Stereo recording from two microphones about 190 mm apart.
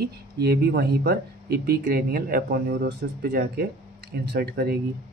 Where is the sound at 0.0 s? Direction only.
55° right (ahead or behind).